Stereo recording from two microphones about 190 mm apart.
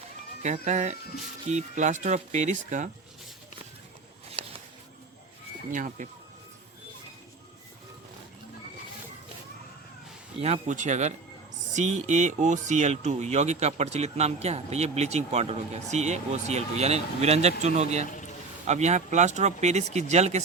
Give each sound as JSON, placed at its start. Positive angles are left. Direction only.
{"t": 0.4, "sound": "speech", "side_deg": -40}
{"t": 5.7, "sound": "speech", "side_deg": -45}
{"t": 10.4, "sound": "speech", "side_deg": -40}
{"t": 18.0, "sound": "a sound", "side_deg": 40}
{"t": 18.6, "sound": "speech", "side_deg": -35}